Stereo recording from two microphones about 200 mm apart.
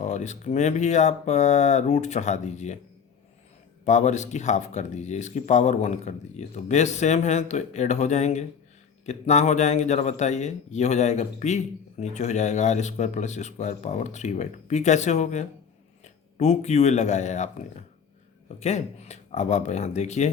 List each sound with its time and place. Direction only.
0.0 s speech: 35° left (ahead or behind)
3.8 s speech: 35° left (ahead or behind)
18.6 s speech: 35° left (ahead or behind)